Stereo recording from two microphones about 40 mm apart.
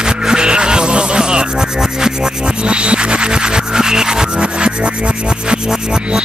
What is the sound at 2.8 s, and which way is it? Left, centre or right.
Music, right.